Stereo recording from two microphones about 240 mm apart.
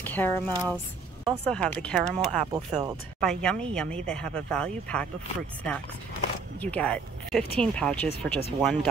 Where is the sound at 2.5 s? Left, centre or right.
Centre.